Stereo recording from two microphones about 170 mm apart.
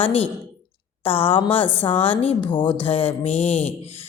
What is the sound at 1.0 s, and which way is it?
Speech, 35° left (ahead or behind).